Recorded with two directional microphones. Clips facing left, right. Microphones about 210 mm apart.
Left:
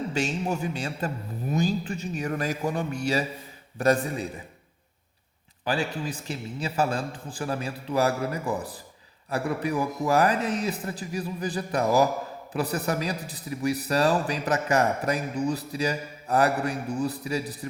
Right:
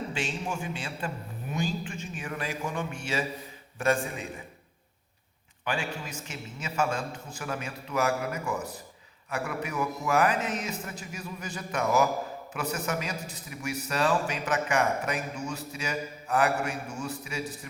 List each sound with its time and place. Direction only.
0.1 s a man's voice: 40° left (ahead or behind)
5.6 s a man's voice: 35° left (ahead or behind)